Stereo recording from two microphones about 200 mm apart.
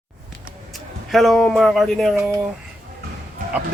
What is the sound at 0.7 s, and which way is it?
Speech, centre (ahead or behind).